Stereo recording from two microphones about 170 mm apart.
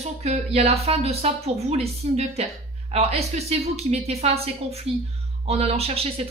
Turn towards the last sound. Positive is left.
turn(degrees=-35)  # may be behind; listen again after turning